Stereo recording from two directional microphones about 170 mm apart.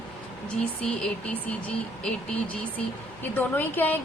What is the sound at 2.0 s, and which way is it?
A woman's voice, 5° left (ahead or behind).